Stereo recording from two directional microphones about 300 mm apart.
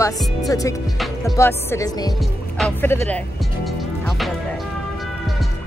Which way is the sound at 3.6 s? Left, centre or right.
Centre.